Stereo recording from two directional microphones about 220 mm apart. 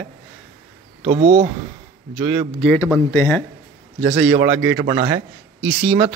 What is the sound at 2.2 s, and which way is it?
Speech, 10° right (ahead or behind).